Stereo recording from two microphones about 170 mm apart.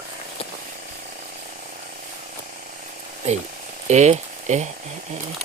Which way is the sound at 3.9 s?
40° right (ahead or behind).